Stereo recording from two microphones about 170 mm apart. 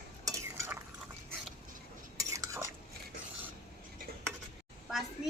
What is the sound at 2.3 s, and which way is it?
Stir, 15° right (ahead or behind).